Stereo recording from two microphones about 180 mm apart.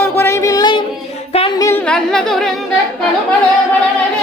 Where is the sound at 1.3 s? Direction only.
35° left (ahead or behind).